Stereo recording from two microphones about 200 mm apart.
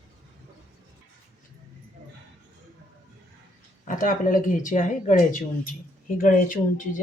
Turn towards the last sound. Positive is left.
turn(degrees=40)  # may be behind; listen again after turning